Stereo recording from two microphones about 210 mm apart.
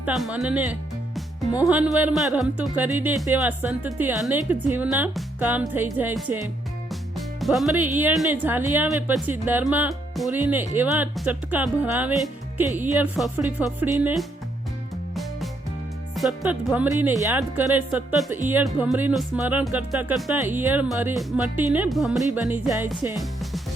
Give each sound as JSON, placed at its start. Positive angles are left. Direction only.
{"t": 0.0, "sound": "speech", "side_deg": -5}
{"t": 15.1, "sound": "music", "side_deg": 0}
{"t": 16.1, "sound": "speech", "side_deg": 0}